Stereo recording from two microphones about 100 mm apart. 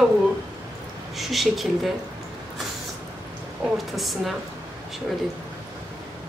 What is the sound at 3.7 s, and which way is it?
Speech, centre (ahead or behind).